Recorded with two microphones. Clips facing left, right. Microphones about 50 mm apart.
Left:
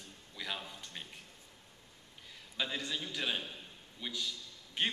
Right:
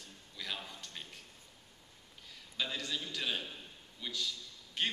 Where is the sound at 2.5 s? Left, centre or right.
Centre.